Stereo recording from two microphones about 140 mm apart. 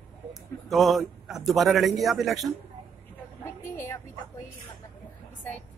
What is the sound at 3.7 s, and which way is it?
Speech, 20° left (ahead or behind).